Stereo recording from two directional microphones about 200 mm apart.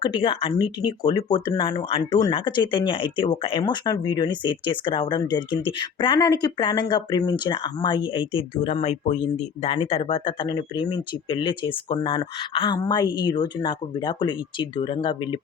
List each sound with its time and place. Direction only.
0.0 s speech: 25° left (ahead or behind)